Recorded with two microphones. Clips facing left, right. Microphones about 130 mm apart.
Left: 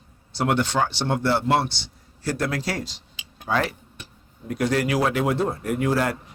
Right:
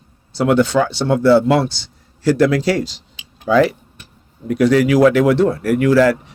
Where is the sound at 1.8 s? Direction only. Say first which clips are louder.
Right 12 dB; 90° right.